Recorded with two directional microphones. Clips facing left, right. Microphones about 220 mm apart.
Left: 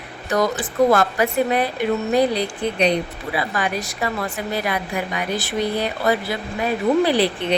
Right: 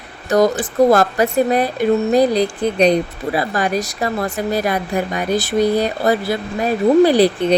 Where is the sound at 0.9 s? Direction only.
40° right (ahead or behind).